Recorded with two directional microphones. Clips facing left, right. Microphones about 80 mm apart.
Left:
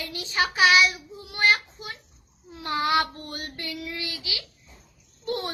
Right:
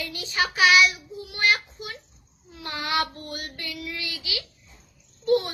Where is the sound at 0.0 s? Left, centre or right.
Left.